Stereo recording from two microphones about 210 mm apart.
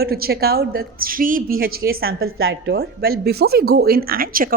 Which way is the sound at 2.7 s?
45° right (ahead or behind).